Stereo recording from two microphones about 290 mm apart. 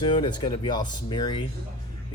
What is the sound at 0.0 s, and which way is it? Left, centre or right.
Speech, centre.